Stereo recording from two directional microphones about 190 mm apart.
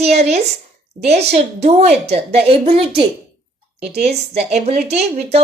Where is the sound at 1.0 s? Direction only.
35° right (ahead or behind).